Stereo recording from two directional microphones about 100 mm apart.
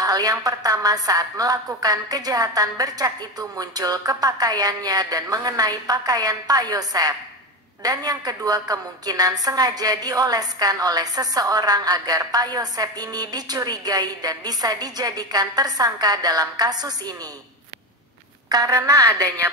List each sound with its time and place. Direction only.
0.0 s a woman's voice: 40° right (ahead or behind)
18.5 s a woman's voice: 40° right (ahead or behind)